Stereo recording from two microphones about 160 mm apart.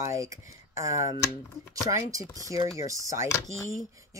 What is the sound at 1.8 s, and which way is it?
Speech, 20° right (ahead or behind).